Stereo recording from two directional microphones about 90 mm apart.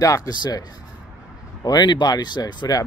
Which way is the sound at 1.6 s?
55° left (ahead or behind).